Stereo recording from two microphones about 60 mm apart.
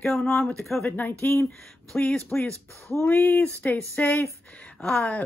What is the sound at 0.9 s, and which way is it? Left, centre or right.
Speech, left.